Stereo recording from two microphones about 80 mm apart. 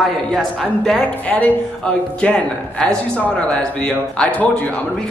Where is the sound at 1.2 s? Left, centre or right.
Centre.